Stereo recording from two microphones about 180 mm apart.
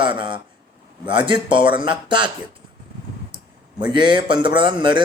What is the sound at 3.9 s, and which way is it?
Speech, 25° right (ahead or behind).